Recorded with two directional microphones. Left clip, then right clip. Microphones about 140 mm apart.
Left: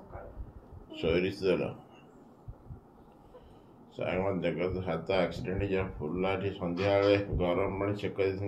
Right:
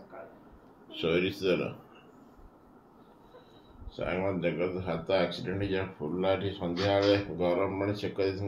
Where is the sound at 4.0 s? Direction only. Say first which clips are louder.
Even; 30° right (ahead or behind).